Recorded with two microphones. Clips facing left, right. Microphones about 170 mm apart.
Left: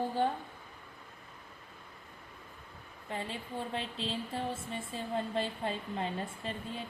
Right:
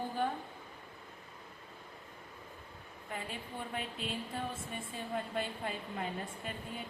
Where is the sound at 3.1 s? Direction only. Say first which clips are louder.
Left 4 dB; 25° left (ahead or behind).